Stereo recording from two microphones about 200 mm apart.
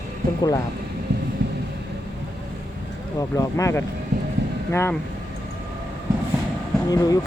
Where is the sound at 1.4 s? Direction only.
60° right (ahead or behind).